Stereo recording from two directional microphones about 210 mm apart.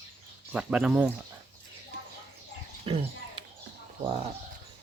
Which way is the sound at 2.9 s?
25° right (ahead or behind).